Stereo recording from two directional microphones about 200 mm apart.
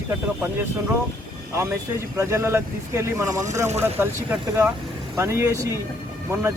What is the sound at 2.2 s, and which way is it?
Speech, 15° right (ahead or behind).